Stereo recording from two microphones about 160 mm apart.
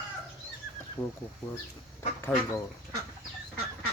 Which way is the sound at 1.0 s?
10° left (ahead or behind).